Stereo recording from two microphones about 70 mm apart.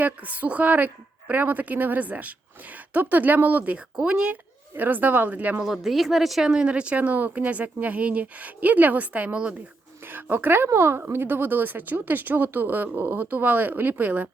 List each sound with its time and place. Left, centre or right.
0.0 s speech: right
4.7 s speech: right
5.6 s speech: centre
10.1 s speech: right